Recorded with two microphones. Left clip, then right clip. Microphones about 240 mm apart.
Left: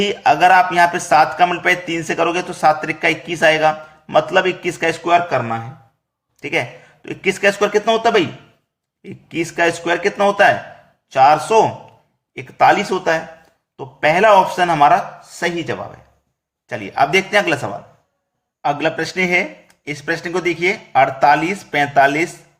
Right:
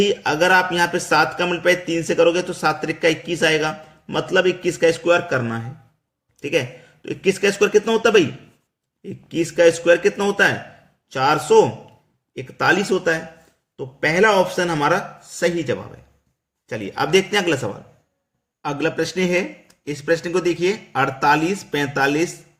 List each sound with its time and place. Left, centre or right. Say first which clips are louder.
0.0 s speech: left 5 dB; centre